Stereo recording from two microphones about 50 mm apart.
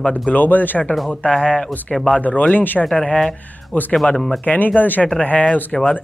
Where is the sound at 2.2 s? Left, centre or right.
Left.